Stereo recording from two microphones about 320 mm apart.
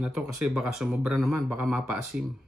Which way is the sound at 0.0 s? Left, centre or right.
Centre.